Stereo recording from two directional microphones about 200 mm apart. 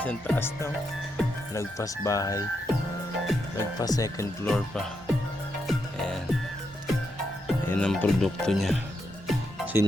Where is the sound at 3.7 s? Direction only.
20° left (ahead or behind).